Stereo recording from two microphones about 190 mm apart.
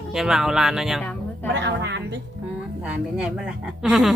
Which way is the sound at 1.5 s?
70° right (ahead or behind).